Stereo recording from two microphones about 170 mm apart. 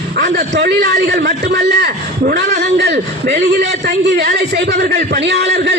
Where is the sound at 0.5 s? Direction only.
80° right.